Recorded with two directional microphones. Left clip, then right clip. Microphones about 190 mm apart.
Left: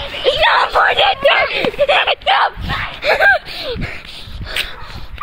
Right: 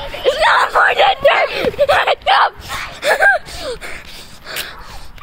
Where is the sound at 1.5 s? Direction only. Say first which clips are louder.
Even; 10° right (ahead or behind).